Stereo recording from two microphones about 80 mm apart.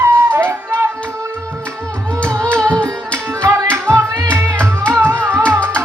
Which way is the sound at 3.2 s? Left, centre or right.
Right.